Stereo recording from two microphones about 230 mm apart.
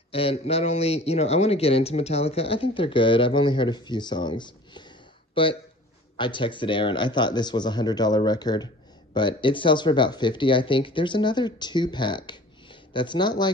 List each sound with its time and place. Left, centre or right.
0.1 s a man's voice: left